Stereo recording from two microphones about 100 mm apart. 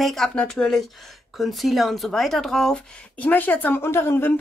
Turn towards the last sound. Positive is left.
turn(degrees=20)  # may be behind; listen again after turning